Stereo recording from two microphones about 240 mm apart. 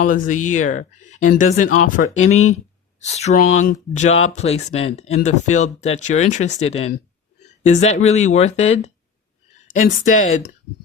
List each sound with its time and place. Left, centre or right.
0.0 s speech: left